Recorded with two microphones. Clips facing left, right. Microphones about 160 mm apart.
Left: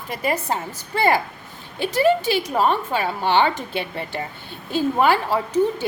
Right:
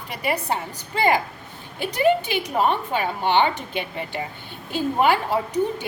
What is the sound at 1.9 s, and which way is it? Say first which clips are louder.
A woman's voice: left 2 dB; 40° left (ahead or behind).